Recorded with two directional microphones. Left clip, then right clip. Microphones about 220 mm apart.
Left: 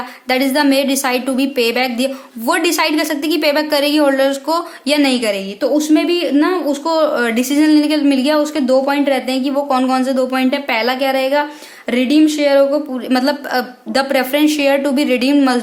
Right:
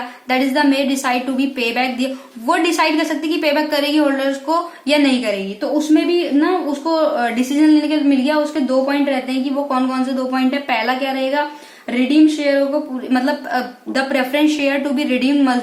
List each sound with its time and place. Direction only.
0.3 s a woman's voice: 50° left (ahead or behind)